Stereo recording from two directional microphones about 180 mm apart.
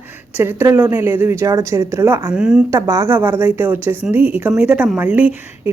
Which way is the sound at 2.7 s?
15° right (ahead or behind).